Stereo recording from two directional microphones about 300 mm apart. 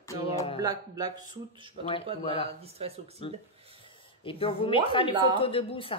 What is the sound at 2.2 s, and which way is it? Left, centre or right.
Speech, centre.